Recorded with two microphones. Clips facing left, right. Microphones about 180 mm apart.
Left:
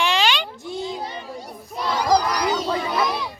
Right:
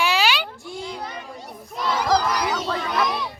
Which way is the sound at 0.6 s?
20° left (ahead or behind).